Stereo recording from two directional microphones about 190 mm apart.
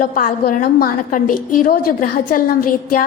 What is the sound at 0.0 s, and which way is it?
A woman's voice, 45° left (ahead or behind).